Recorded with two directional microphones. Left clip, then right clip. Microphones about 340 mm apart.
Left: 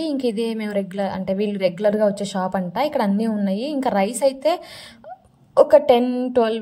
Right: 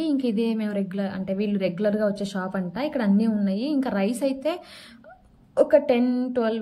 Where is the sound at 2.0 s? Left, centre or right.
Left.